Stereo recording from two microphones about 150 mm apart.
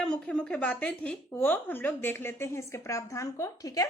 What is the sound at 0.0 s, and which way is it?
A woman's voice, 5° left (ahead or behind).